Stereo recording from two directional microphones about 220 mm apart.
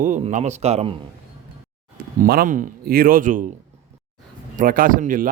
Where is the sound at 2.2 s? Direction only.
40° right (ahead or behind).